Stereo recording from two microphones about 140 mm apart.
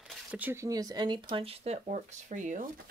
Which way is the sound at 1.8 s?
55° right (ahead or behind).